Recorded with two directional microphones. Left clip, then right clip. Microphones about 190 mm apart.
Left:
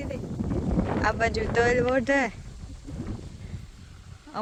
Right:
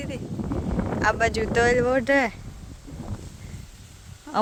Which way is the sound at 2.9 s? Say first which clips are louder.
Left 1 dB; centre (ahead or behind).